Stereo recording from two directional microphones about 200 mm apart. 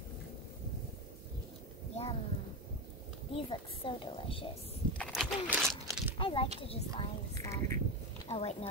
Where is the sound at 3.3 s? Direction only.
25° left (ahead or behind).